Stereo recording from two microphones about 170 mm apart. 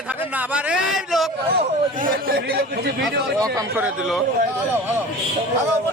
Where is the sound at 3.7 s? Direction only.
10° right (ahead or behind).